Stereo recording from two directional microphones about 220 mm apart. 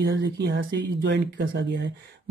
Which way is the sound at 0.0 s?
45° right (ahead or behind).